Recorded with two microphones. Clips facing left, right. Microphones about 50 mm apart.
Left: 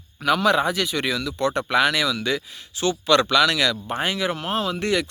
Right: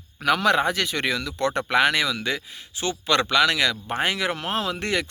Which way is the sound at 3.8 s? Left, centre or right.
Right.